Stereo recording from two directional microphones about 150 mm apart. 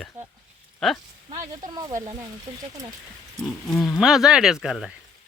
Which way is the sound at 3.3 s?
Centre (ahead or behind).